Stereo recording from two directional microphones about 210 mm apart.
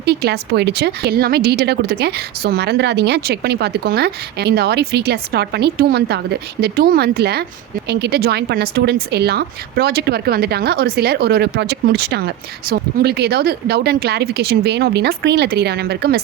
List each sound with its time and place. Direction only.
0.0 s speech: 50° right (ahead or behind)